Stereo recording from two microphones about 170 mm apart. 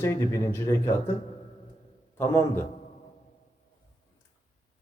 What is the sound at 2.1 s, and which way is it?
Speech, 15° left (ahead or behind).